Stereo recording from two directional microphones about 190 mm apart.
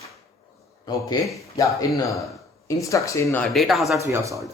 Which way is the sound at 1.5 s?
15° left (ahead or behind).